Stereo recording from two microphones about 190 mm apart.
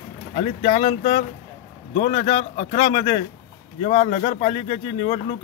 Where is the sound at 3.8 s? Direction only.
35° left (ahead or behind).